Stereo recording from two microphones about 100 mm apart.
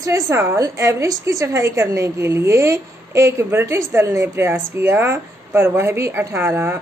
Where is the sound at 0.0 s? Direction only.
30° right (ahead or behind).